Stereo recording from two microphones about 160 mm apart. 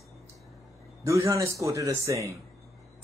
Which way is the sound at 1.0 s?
20° right (ahead or behind).